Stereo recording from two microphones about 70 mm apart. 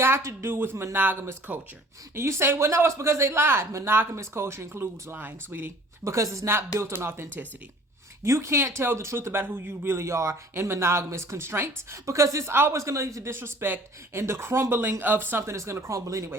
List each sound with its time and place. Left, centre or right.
0.0 s speech: right
6.1 s speech: right
12.7 s speech: right
15.4 s speech: right